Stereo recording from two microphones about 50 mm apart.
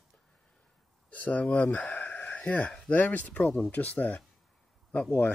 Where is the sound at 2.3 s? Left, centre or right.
Left.